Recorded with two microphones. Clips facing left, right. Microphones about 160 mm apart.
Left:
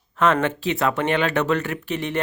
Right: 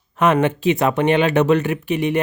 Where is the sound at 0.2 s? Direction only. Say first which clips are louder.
Right 3 dB; 15° right (ahead or behind).